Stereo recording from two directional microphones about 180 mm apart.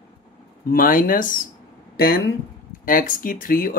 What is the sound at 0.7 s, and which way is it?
Speech, 50° left (ahead or behind).